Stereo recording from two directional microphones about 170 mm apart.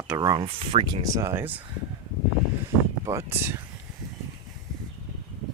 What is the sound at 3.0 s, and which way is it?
Speech, 15° right (ahead or behind).